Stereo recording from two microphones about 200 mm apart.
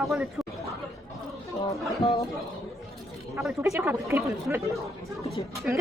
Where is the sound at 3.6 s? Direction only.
15° right (ahead or behind).